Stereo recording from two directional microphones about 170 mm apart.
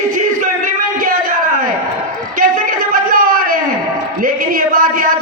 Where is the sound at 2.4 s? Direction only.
50° right (ahead or behind).